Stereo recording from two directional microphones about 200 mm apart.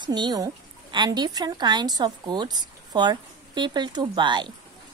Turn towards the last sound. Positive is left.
turn(degrees=-25)  # may be behind; listen again after turning